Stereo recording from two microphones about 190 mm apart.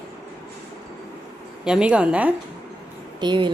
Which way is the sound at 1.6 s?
5° right (ahead or behind).